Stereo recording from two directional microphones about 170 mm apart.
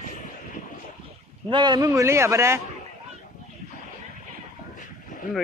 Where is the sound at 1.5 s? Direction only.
25° right (ahead or behind).